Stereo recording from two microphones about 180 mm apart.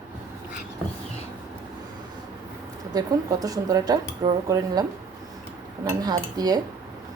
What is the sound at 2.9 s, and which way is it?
Speech, 20° right (ahead or behind).